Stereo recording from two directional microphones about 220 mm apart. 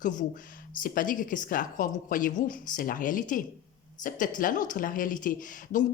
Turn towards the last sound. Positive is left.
turn(degrees=35)  # may be behind; listen again after turning